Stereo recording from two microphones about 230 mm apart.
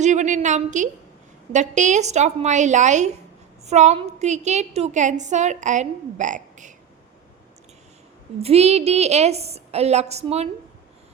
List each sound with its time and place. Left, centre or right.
0.0 s a woman's voice: right
8.4 s a woman's voice: right